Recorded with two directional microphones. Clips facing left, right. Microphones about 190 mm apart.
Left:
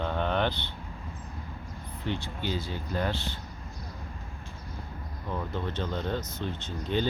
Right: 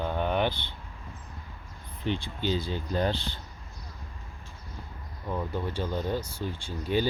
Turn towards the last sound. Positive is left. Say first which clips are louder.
# right 2 dB
turn(degrees=-10)  # may be behind; listen again after turning